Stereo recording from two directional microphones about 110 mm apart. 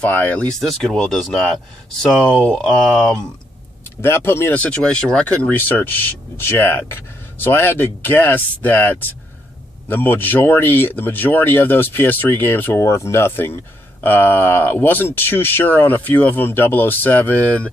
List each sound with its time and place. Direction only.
0.0 s speech: 15° left (ahead or behind)
4.0 s speech: 20° left (ahead or behind)